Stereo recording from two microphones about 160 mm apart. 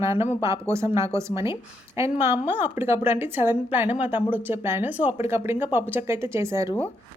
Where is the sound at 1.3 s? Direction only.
35° left (ahead or behind).